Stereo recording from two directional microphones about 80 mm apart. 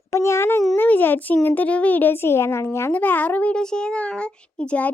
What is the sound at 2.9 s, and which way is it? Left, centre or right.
A child's voice, left.